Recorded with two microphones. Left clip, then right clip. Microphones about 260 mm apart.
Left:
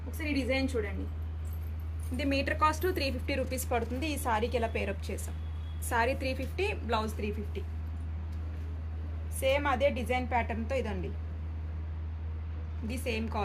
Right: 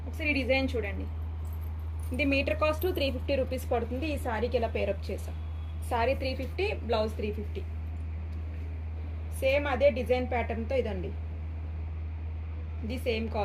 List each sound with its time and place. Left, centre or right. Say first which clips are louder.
0.2 s a woman's voice: right 4 dB; centre
2.1 s a woman's voice: right 3 dB; left
9.4 s a woman's voice: right 2 dB; left
12.9 s a woman's voice: right 3 dB; left